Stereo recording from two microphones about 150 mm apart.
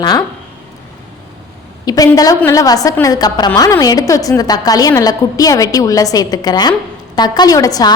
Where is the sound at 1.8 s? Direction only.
25° left (ahead or behind).